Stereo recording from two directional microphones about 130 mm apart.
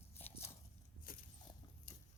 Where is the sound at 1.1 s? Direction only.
90° left.